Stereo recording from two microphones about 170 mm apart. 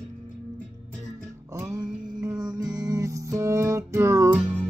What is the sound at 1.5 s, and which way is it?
Music, 20° right (ahead or behind).